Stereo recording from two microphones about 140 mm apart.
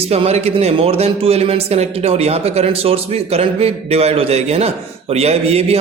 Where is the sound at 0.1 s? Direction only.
50° right (ahead or behind).